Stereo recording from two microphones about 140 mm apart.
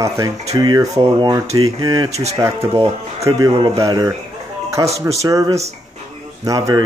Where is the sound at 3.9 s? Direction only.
25° right (ahead or behind).